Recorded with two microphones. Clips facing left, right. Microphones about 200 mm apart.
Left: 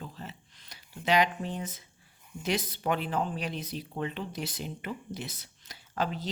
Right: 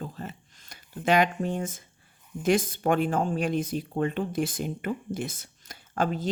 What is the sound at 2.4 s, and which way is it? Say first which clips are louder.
Speech: right 7 dB; 50° right (ahead or behind).